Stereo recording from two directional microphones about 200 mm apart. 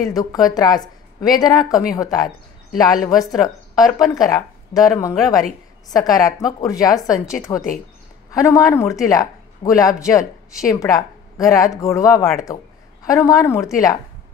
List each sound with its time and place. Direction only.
0.0 s a woman's voice: 20° left (ahead or behind)